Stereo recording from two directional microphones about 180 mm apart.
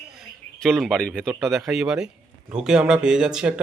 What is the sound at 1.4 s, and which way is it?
A man's voice, centre (ahead or behind).